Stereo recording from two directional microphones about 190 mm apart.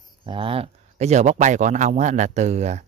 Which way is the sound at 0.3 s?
30° right (ahead or behind).